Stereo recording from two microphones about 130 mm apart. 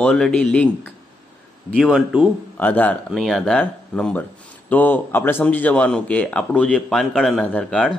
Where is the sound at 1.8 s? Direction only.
5° right (ahead or behind).